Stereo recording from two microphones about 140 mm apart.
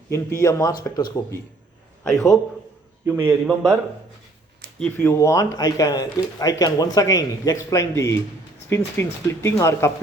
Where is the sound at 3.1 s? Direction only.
10° right (ahead or behind).